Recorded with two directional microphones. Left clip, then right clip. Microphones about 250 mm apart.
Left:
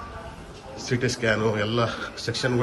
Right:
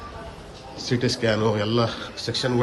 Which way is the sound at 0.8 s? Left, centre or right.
Centre.